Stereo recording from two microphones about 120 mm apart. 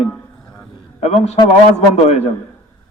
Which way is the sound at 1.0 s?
65° left (ahead or behind).